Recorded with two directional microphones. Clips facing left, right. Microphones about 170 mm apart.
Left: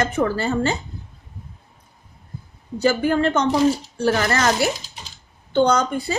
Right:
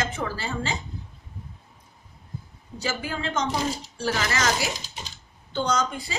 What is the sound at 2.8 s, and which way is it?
A woman's voice, 65° left (ahead or behind).